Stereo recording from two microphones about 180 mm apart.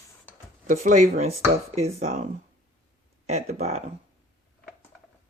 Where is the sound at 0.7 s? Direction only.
45° right (ahead or behind).